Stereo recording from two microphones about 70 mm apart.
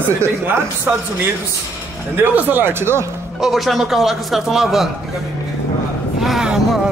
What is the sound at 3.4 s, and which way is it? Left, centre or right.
Speech, centre.